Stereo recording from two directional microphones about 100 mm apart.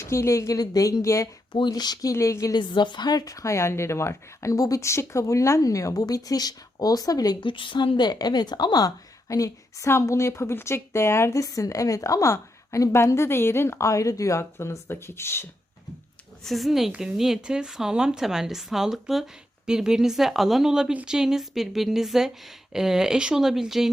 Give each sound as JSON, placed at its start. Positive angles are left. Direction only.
{"t": 0.0, "sound": "speech", "side_deg": 30}
{"t": 1.5, "sound": "speech", "side_deg": 45}
{"t": 2.6, "sound": "speech", "side_deg": 50}
{"t": 7.4, "sound": "a woman's voice", "side_deg": 55}
{"t": 16.4, "sound": "speech", "side_deg": 0}